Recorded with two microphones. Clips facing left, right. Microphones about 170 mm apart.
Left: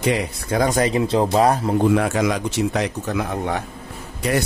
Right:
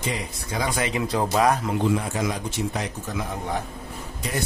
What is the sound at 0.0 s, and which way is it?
Speech, 65° left (ahead or behind).